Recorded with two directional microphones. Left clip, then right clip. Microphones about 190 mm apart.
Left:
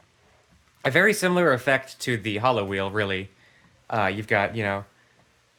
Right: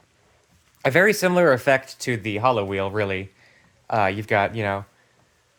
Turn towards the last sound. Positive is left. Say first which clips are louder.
# right 2 dB
turn(degrees=-20)  # may be behind; listen again after turning